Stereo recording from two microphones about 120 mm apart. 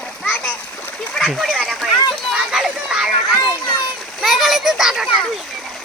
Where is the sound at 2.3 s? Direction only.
5° right (ahead or behind).